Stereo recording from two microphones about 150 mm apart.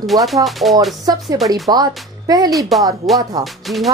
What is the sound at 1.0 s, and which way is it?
Speech, 25° right (ahead or behind).